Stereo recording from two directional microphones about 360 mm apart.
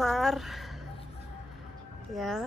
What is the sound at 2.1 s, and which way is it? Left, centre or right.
Speech, centre.